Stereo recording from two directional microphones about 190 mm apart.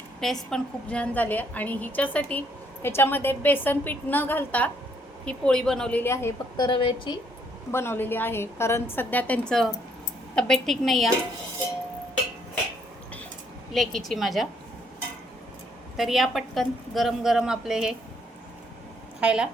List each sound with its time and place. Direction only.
0.2 s a woman's voice: centre (ahead or behind)
6.7 s a woman's voice: 25° left (ahead or behind)
7.7 s a woman's voice: 10° left (ahead or behind)
13.7 s a woman's voice: centre (ahead or behind)
16.0 s a woman's voice: centre (ahead or behind)
19.2 s a woman's voice: 5° right (ahead or behind)